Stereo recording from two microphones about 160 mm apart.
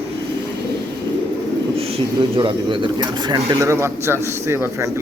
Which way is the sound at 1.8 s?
35° right (ahead or behind).